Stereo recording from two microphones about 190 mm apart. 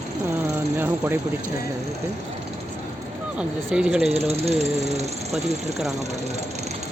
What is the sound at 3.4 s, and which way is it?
Speech, 5° right (ahead or behind).